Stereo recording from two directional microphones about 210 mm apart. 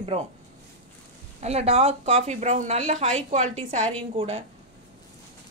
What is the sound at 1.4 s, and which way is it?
A woman's voice, 30° right (ahead or behind).